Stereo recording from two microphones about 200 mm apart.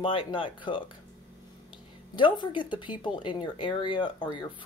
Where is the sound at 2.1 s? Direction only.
25° left (ahead or behind).